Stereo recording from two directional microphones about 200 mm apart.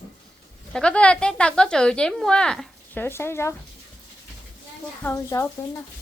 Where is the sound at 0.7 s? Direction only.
5° left (ahead or behind).